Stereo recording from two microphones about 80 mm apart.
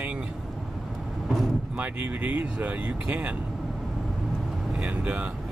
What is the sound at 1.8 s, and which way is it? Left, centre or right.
Speech, centre.